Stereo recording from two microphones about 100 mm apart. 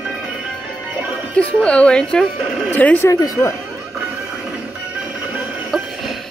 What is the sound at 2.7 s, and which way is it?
Speech, 20° left (ahead or behind).